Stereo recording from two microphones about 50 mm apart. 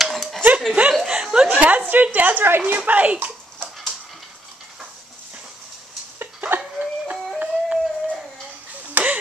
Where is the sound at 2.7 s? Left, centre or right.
Right.